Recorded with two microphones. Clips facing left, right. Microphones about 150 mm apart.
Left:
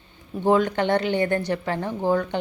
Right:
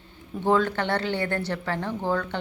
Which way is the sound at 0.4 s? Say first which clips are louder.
Left 3 dB; 15° left (ahead or behind).